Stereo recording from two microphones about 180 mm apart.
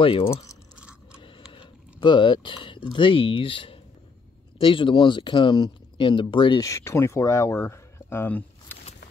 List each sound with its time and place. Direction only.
0.0 s speech: 30° left (ahead or behind)
1.5 s speech: 25° left (ahead or behind); by 8.7 s 10° left (ahead or behind)